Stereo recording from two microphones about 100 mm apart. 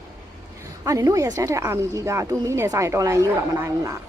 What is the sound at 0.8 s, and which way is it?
A woman's voice, 35° right (ahead or behind).